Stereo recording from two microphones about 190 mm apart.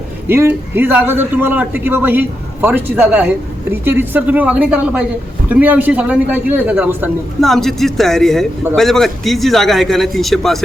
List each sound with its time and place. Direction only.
0.3 s a man's voice: 10° right (ahead or behind)
7.4 s a man's voice: centre (ahead or behind)